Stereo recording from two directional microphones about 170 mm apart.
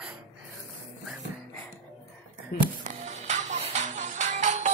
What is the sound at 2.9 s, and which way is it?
Music, 45° right (ahead or behind).